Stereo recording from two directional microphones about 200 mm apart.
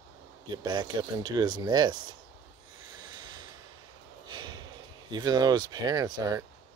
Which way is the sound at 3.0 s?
20° right (ahead or behind).